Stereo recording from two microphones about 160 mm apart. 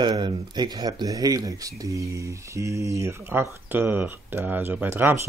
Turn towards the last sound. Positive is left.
turn(degrees=-10)  # may be behind; listen again after turning